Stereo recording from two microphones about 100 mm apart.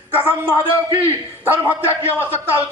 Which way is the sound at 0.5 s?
20° right (ahead or behind).